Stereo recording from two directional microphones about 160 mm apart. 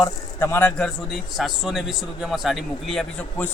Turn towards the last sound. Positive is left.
turn(degrees=5)  # may be behind; listen again after turning